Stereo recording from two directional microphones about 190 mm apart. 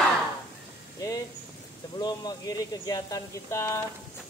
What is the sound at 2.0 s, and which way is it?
Speech, 20° left (ahead or behind).